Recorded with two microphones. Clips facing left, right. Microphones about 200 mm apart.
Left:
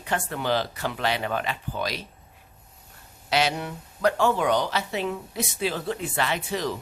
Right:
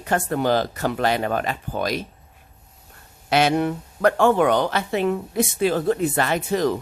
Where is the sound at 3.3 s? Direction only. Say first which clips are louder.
Right 6 dB; 55° right (ahead or behind).